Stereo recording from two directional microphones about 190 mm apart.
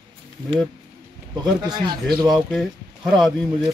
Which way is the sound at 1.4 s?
20° right (ahead or behind).